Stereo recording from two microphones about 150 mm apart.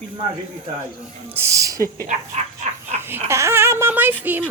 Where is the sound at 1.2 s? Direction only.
15° right (ahead or behind).